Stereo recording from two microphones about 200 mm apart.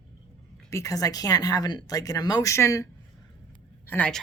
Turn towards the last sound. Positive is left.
turn(degrees=5)  # may be behind; listen again after turning